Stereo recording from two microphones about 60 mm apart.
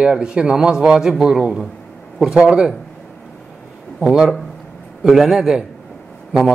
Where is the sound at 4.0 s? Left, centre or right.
Centre.